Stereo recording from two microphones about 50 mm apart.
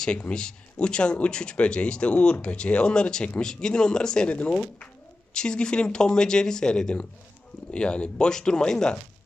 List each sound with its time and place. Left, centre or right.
0.0 s speech: left
4.3 s speech: left
5.3 s speech: centre